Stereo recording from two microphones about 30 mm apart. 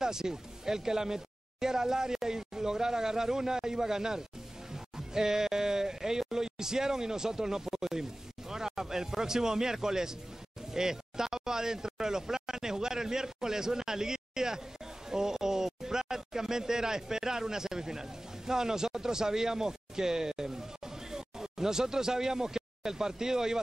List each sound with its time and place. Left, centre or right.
0.0 s a man's voice: centre